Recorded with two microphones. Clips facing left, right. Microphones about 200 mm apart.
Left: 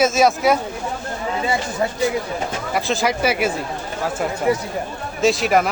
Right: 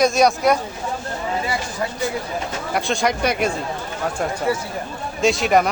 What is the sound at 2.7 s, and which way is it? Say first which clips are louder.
Speech: even; centre (ahead or behind).